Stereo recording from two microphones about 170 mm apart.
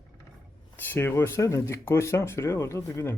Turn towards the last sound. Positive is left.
turn(degrees=20)  # may be behind; listen again after turning